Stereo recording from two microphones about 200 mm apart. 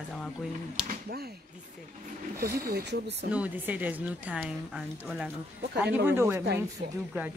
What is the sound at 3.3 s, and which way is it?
A woman's voice, 10° right (ahead or behind).